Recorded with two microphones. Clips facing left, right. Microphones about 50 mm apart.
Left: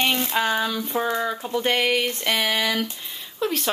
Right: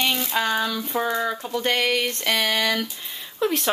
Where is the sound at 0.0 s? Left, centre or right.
Left.